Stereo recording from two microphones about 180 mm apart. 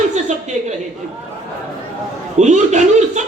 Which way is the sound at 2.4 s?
40° right (ahead or behind).